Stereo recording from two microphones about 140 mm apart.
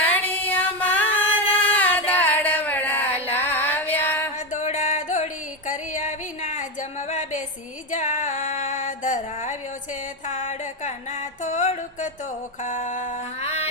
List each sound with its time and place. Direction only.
0.1 s music: 10° left (ahead or behind)
1.7 s a sound: 10° left (ahead or behind)
4.4 s music: 60° left (ahead or behind)
12.6 s mantra: 65° left (ahead or behind)
13.4 s music: 50° left (ahead or behind)